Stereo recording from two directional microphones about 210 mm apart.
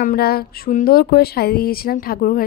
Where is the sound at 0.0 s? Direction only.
45° left (ahead or behind).